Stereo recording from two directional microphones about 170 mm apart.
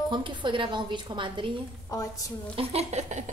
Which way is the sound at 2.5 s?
40° right (ahead or behind).